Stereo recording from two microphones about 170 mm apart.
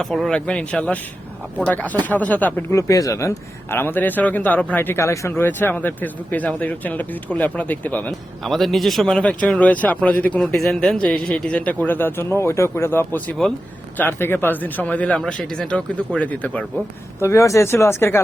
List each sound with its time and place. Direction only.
0.0 s speech: centre (ahead or behind)